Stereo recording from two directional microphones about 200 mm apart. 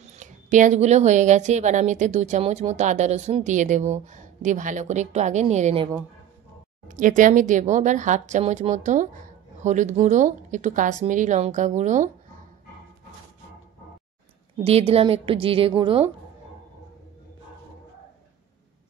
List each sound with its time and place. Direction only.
0.0 s speech: 35° right (ahead or behind)
6.9 s speech: 40° right (ahead or behind)
14.6 s a woman's voice: 30° right (ahead or behind)